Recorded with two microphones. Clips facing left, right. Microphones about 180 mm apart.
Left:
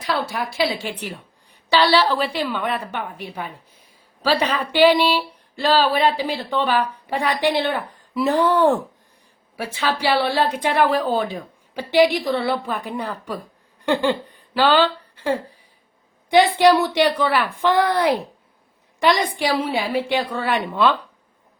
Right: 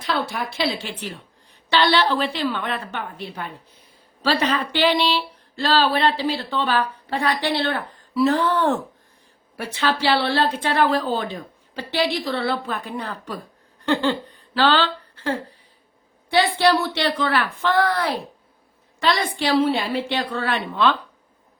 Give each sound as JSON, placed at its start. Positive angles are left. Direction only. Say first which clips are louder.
{"t": 0.0, "sound": "speech", "louder": "left 1 dB", "side_deg": 0}